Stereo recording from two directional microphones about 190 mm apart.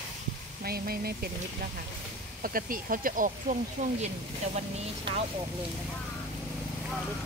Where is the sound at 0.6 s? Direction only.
50° right (ahead or behind).